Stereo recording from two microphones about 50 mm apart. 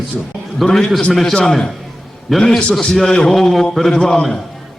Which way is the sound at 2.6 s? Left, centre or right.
Centre.